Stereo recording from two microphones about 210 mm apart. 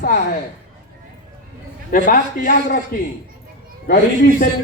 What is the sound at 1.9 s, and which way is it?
A man's voice, 40° left (ahead or behind).